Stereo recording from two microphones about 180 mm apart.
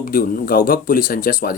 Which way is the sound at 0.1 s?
55° left (ahead or behind).